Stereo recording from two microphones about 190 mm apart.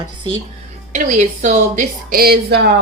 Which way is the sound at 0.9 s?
40° right (ahead or behind).